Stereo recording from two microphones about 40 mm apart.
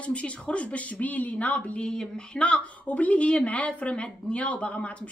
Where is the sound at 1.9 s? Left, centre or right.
Left.